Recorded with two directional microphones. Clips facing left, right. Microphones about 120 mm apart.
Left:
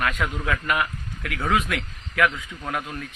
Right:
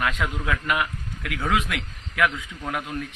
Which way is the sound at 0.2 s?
5° right (ahead or behind).